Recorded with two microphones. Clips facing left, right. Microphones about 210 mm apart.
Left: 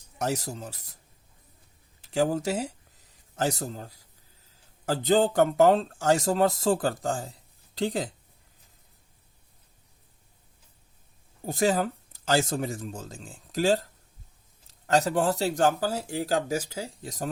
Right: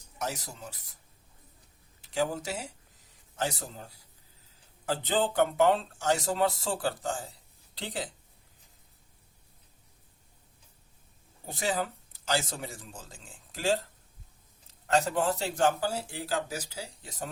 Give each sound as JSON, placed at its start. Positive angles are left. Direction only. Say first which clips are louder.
{"t": 0.2, "sound": "speech", "louder": "left 7 dB", "side_deg": 45}
{"t": 2.1, "sound": "speech", "louder": "left 6 dB", "side_deg": 45}
{"t": 5.1, "sound": "speech", "louder": "left 5 dB", "side_deg": 45}
{"t": 11.4, "sound": "speech", "louder": "left 7 dB", "side_deg": 45}
{"t": 15.1, "sound": "speech", "louder": "left 4 dB", "side_deg": 40}